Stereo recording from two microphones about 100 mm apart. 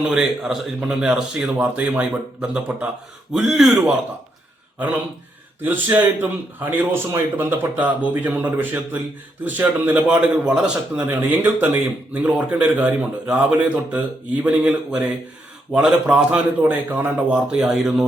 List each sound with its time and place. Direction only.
0.1 s a man's voice: 5° right (ahead or behind)
5.6 s a man's voice: 15° right (ahead or behind)